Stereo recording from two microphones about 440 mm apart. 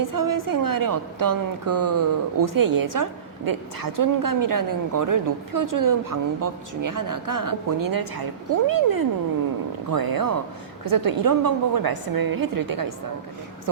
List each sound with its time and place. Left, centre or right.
0.0 s a woman's voice: right